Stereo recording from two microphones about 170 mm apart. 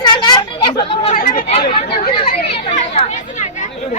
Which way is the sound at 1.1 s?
55° left (ahead or behind).